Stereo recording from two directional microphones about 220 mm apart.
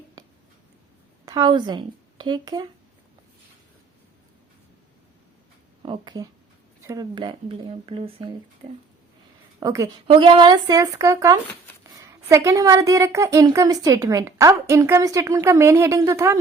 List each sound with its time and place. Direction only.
1.2 s speech: 20° right (ahead or behind)
5.8 s speech: 20° right (ahead or behind)
9.6 s a woman's voice: 15° right (ahead or behind)